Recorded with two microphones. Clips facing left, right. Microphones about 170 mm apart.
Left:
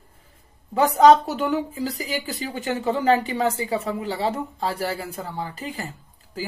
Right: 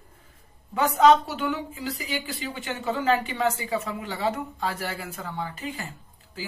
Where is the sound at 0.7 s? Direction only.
35° left (ahead or behind).